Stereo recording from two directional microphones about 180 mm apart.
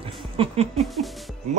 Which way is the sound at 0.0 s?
35° right (ahead or behind).